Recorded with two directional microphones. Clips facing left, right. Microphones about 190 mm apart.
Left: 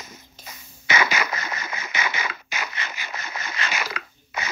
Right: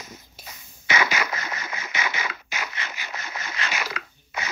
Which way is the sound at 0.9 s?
50° left (ahead or behind).